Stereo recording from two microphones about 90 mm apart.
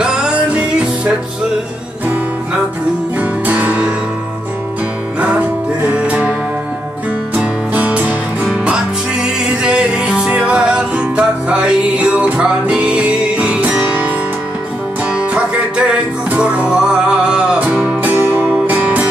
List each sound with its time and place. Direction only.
0.0 s music: 10° right (ahead or behind)
3.2 s music: 15° right (ahead or behind)
5.2 s music: 15° right (ahead or behind)
7.3 s music: 15° right (ahead or behind)